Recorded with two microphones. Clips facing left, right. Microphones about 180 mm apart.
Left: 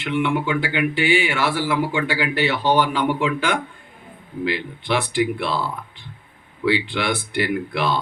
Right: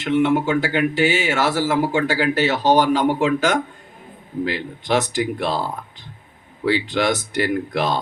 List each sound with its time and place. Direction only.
0.0 s speech: 40° right (ahead or behind)